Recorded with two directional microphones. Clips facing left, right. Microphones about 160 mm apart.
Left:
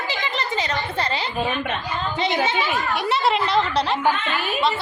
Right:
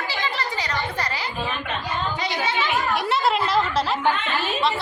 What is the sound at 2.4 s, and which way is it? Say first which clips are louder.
Speech: left 2 dB; 15° left (ahead or behind).